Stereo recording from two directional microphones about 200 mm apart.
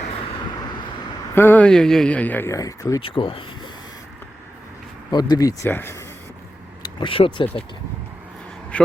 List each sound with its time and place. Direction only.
1.4 s speech: 10° left (ahead or behind); by 3.7 s 25° left (ahead or behind)
5.1 s speech: 20° left (ahead or behind)
6.8 s speech: 25° left (ahead or behind)
8.7 s a man's voice: 5° left (ahead or behind)